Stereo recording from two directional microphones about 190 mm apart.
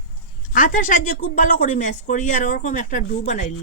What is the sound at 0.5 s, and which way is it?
Speech, 45° left (ahead or behind).